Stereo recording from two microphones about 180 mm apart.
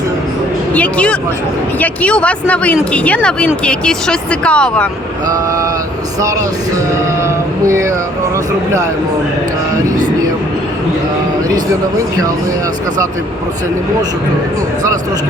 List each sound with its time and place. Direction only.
0.7 s a woman's voice: 5° left (ahead or behind)
5.3 s vehicle: 20° right (ahead or behind)
7.2 s a sound: 15° right (ahead or behind)